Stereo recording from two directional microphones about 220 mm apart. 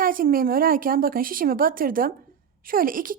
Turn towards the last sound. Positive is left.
turn(degrees=-40)  # may be behind; listen again after turning